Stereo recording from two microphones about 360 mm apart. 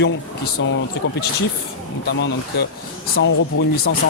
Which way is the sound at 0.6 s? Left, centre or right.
Left.